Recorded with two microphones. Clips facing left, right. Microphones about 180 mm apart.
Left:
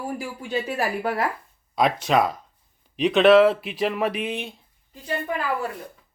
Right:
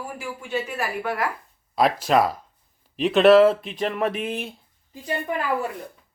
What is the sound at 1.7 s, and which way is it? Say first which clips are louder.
Speech: right 1 dB; centre (ahead or behind).